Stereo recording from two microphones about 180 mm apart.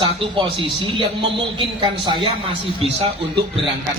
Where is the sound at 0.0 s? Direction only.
30° right (ahead or behind).